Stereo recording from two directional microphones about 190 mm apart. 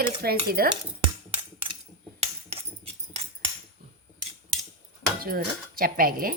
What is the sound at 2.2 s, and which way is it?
Hammer, 30° right (ahead or behind).